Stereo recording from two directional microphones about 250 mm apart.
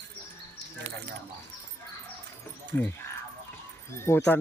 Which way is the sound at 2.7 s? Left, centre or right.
Centre.